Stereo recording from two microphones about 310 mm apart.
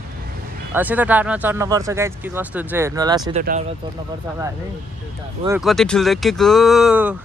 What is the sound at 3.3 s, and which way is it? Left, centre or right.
Speech, right.